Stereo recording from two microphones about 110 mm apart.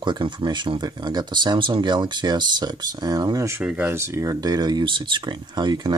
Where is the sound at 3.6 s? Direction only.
20° right (ahead or behind).